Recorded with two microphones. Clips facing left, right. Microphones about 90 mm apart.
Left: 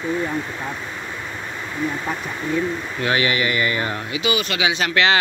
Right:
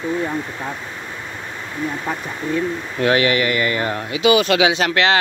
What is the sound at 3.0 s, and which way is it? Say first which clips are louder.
Speech: right 4 dB; 55° right (ahead or behind).